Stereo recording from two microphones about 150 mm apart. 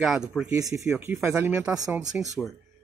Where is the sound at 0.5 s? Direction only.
20° right (ahead or behind).